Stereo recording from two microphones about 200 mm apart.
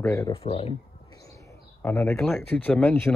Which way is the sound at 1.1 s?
15° left (ahead or behind).